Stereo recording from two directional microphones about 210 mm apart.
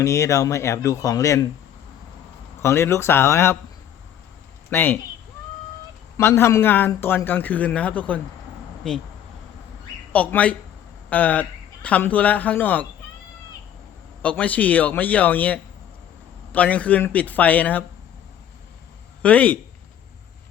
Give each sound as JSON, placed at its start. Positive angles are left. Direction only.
{"t": 0.0, "sound": "a man's voice", "side_deg": 15}
{"t": 2.6, "sound": "a man's voice", "side_deg": 10}
{"t": 4.7, "sound": "a man's voice", "side_deg": 10}
{"t": 6.1, "sound": "a man's voice", "side_deg": 10}
{"t": 10.1, "sound": "a man's voice", "side_deg": 5}
{"t": 14.2, "sound": "a man's voice", "side_deg": 5}
{"t": 19.2, "sound": "a man's voice", "side_deg": 5}